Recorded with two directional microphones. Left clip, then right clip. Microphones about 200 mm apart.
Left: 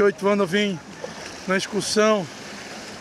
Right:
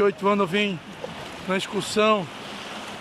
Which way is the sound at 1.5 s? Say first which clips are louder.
Left 3 dB; centre (ahead or behind).